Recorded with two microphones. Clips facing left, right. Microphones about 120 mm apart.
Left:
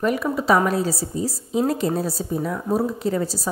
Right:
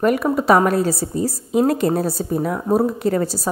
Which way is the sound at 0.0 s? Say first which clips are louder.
Right 4 dB; 55° right (ahead or behind).